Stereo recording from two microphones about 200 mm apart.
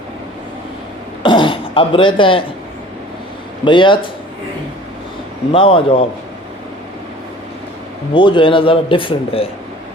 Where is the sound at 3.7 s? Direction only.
25° left (ahead or behind).